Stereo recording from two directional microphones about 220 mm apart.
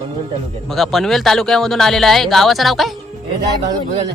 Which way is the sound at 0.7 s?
Centre (ahead or behind).